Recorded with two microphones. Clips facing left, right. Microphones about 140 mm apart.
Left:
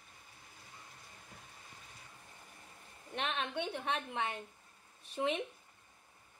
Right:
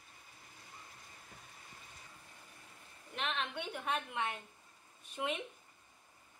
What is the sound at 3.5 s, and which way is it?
Speech, 30° left (ahead or behind).